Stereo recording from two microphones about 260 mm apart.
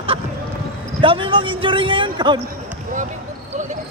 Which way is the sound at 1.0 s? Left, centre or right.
Right.